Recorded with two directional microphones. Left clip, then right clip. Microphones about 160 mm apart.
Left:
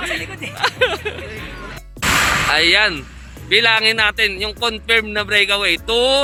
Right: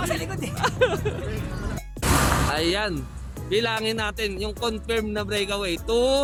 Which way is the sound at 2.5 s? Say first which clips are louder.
Left 11 dB; 10° left (ahead or behind).